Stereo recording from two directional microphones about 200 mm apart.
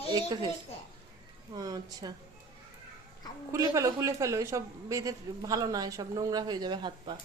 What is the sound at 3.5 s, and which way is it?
A woman's voice, 15° right (ahead or behind).